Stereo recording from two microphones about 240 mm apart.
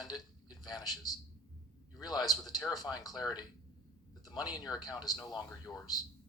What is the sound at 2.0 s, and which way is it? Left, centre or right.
Speech, centre.